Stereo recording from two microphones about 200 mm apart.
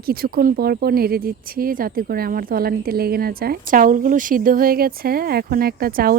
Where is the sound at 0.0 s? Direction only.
50° right (ahead or behind).